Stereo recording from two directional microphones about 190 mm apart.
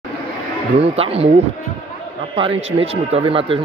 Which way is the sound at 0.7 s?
30° right (ahead or behind).